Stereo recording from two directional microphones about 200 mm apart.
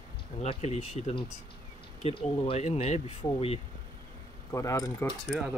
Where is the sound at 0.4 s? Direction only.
30° left (ahead or behind).